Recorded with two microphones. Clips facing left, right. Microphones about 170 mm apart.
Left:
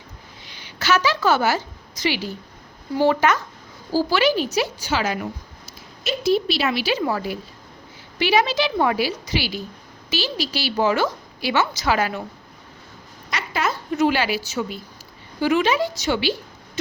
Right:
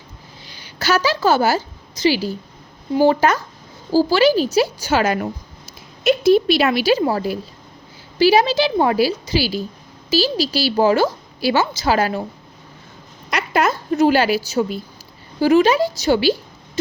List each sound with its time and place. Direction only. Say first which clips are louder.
0.4 s a woman's voice: right 2 dB; 35° right (ahead or behind)
7.0 s a woman's voice: right 4 dB; 35° right (ahead or behind)
13.3 s a sound: right 6 dB; 55° right (ahead or behind)
13.9 s a woman's voice: right 5 dB; 35° right (ahead or behind)